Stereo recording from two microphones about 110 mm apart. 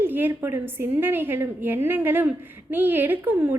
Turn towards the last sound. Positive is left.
turn(degrees=-15)  # may be behind; listen again after turning